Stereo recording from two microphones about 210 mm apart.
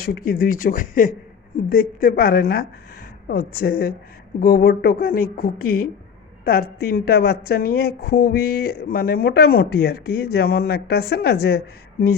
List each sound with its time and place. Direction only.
0.0 s a woman's voice: 45° left (ahead or behind)